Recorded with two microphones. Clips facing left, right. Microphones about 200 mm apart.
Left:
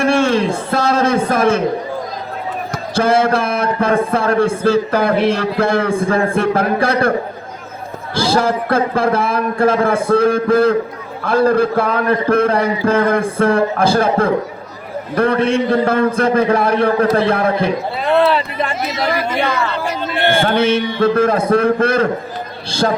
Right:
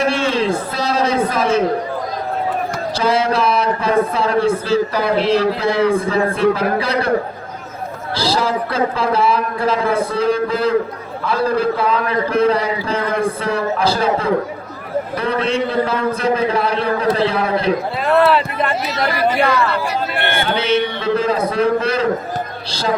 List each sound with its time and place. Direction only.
0.0 s music: 50° left (ahead or behind)
0.7 s a man's voice: 50° left (ahead or behind)
2.9 s a man's voice: 50° left (ahead or behind)
8.1 s a man's voice: 50° left (ahead or behind)
18.3 s speech: centre (ahead or behind)
20.4 s a man's voice: 50° left (ahead or behind)